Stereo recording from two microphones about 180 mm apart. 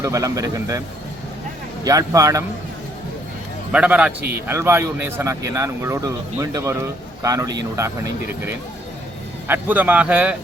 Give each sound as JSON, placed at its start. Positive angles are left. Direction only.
{"t": 0.0, "sound": "speech", "side_deg": -20}
{"t": 1.8, "sound": "speech", "side_deg": -20}
{"t": 3.7, "sound": "speech", "side_deg": -5}